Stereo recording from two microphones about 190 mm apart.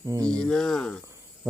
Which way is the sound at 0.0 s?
15° right (ahead or behind).